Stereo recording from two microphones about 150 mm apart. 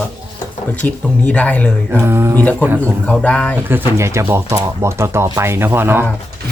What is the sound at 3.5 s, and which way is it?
Speech, 15° right (ahead or behind).